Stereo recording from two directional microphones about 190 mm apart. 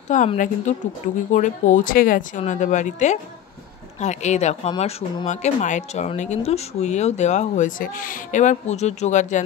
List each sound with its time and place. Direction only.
0.1 s speech: 40° left (ahead or behind)